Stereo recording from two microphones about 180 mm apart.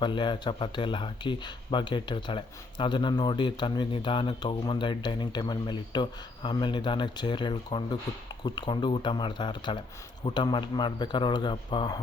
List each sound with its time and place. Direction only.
0.0 s speech: 25° left (ahead or behind)